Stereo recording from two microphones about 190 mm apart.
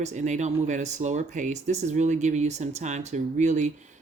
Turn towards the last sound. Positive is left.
turn(degrees=-40)  # may be behind; listen again after turning